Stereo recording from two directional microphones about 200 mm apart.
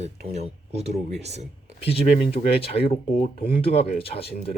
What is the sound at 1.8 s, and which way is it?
Speech, 30° left (ahead or behind).